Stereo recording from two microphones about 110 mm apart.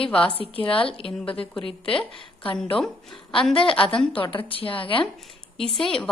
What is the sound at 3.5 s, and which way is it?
A woman's voice, 55° left (ahead or behind).